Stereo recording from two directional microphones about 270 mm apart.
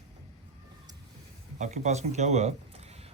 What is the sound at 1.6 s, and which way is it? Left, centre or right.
Speech, right.